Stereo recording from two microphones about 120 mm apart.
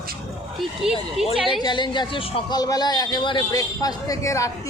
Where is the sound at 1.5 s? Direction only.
40° left (ahead or behind).